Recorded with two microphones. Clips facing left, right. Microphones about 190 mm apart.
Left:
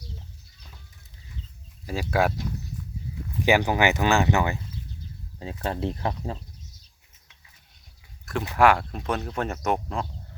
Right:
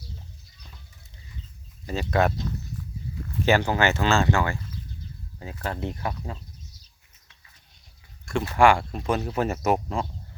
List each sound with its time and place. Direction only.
1.9 s speech: 10° left (ahead or behind); by 6.4 s 30° left (ahead or behind)
8.2 s a sound: centre (ahead or behind)
8.5 s speech: centre (ahead or behind)